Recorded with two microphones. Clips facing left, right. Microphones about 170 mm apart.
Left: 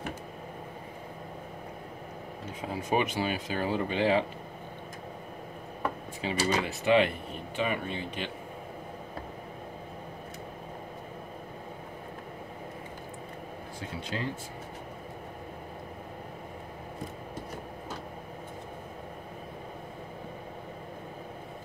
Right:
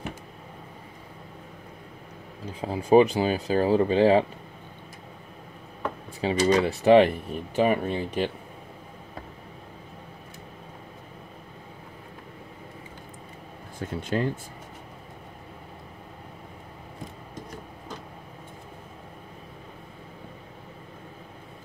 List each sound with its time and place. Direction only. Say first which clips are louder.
2.4 s speech: right 5 dB; 35° right (ahead or behind)
6.2 s speech: right 7 dB; 35° right (ahead or behind)
13.7 s speech: right 9 dB; 50° right (ahead or behind)